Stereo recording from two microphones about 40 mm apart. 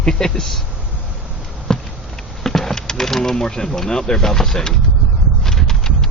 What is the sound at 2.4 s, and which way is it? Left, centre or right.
Speech, centre.